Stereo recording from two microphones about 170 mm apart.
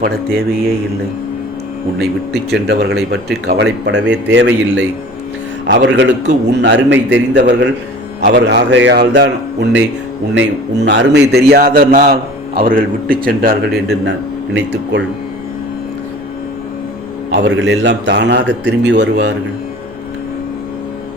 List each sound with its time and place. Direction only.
0.0 s a man's voice: 65° right (ahead or behind)
2.0 s speech: 75° right (ahead or behind)
3.4 s a man's voice: 90° right
5.6 s a man's voice: 90° right
8.2 s a man's voice: 75° right (ahead or behind)
17.3 s a man's voice: 90° right